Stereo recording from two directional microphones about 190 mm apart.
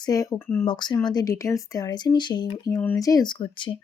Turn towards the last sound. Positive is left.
turn(degrees=25)  # may be behind; listen again after turning